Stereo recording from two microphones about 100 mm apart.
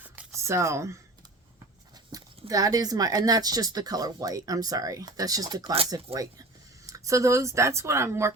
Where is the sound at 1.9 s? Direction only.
40° right (ahead or behind).